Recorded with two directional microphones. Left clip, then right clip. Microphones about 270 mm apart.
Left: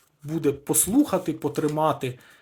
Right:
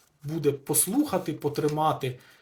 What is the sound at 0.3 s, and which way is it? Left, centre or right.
Speech, left.